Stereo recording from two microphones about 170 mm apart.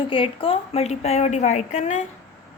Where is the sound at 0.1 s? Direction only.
30° left (ahead or behind).